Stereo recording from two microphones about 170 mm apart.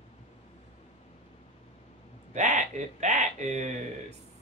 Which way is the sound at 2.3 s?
45° right (ahead or behind).